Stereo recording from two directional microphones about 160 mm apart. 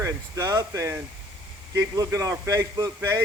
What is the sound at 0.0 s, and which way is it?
A man's voice, 20° right (ahead or behind).